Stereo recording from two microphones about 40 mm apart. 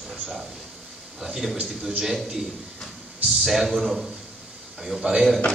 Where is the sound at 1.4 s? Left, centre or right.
Centre.